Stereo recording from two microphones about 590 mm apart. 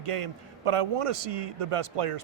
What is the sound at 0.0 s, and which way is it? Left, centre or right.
A man's voice, right.